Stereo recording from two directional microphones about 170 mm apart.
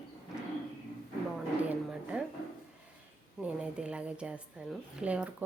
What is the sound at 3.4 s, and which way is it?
A woman's voice, 5° right (ahead or behind).